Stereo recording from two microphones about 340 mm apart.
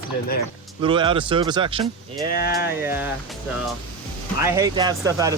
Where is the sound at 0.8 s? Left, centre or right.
Centre.